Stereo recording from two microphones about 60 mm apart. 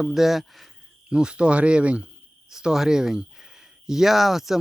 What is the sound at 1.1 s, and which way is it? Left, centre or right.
Speech, centre.